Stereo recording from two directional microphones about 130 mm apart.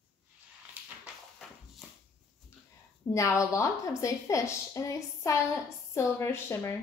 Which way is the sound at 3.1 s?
25° left (ahead or behind).